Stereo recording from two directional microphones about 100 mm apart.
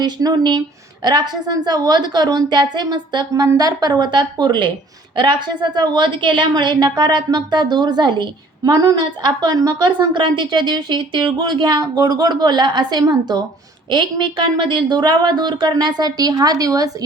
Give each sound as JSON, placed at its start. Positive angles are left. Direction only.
{"t": 0.0, "sound": "a woman's voice", "side_deg": -45}